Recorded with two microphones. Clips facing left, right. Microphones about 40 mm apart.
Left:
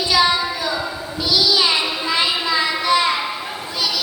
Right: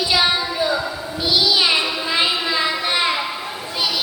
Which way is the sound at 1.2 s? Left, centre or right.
Right.